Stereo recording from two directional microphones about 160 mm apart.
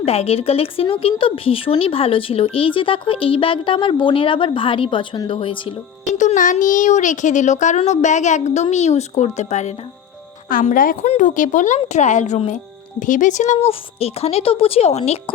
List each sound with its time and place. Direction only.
0.0 s a woman's voice: 40° left (ahead or behind)
6.1 s speech: 50° left (ahead or behind)
10.5 s a woman's voice: 55° left (ahead or behind); by 15.2 s 40° left (ahead or behind)